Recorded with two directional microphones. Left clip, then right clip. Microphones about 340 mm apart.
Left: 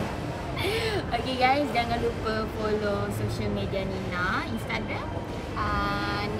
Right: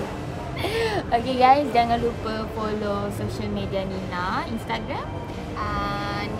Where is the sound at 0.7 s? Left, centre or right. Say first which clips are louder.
Right 7 dB; centre.